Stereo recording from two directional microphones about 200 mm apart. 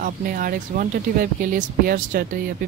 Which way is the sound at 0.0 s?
45° right (ahead or behind).